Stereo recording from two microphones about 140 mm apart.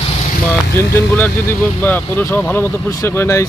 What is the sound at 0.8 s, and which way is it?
Speech, 15° left (ahead or behind).